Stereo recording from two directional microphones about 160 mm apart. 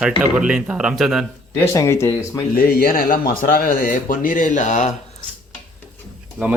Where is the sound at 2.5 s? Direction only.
70° left (ahead or behind); by 4.9 s 50° left (ahead or behind).